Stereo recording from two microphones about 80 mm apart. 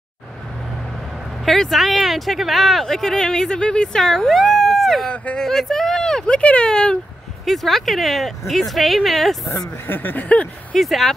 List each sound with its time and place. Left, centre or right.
1.4 s speech: centre
5.1 s speech: centre
5.4 s speech: centre
9.8 s a sound: left
10.8 s speech: centre